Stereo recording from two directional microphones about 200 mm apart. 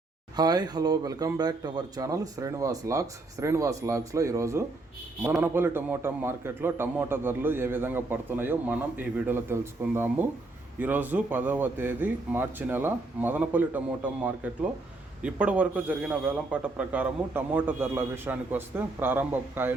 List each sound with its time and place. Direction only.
0.3 s a man's voice: 20° right (ahead or behind)